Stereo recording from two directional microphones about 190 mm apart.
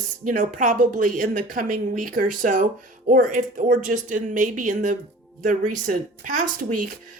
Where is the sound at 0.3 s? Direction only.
45° right (ahead or behind).